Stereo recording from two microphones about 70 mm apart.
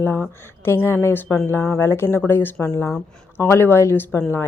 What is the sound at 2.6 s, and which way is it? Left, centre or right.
Speech, left.